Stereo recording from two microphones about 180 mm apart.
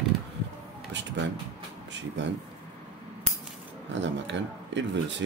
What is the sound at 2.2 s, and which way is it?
Speech, 90° right.